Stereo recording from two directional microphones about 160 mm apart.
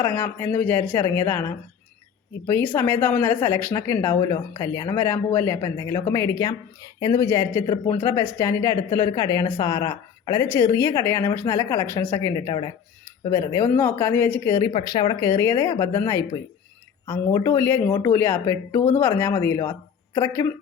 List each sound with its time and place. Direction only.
0.0 s speech: 15° left (ahead or behind)
14.7 s speech: 35° left (ahead or behind); by 20.5 s 15° left (ahead or behind)